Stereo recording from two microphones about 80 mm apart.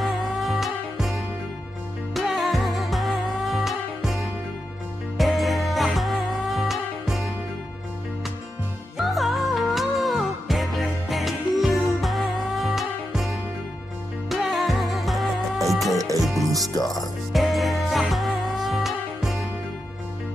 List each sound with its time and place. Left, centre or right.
0.0 s music: centre
8.9 s music: centre
16.0 s music: right
17.3 s music: centre